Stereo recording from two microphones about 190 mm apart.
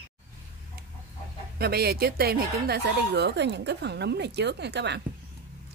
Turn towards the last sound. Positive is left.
turn(degrees=-65)  # may be behind; listen again after turning